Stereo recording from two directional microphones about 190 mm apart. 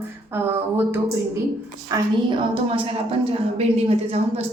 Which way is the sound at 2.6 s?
30° right (ahead or behind).